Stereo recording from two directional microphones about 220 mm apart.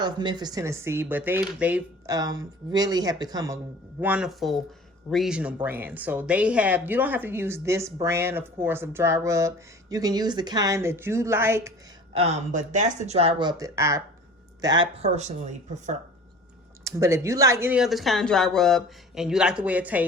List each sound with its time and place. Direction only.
0.0 s a woman's voice: 20° right (ahead or behind)
4.0 s a woman's voice: 5° right (ahead or behind)
12.1 s speech: 30° right (ahead or behind)
16.8 s speech: 15° right (ahead or behind)